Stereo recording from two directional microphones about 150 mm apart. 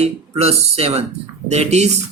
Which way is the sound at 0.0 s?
45° right (ahead or behind).